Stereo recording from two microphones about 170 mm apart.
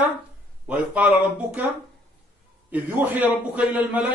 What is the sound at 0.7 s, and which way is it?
Speech, 5° right (ahead or behind).